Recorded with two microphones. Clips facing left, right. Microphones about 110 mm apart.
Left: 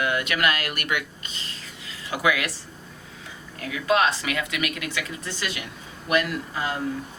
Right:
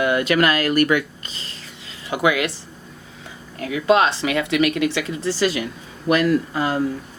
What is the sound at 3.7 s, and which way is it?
Speech, 25° right (ahead or behind).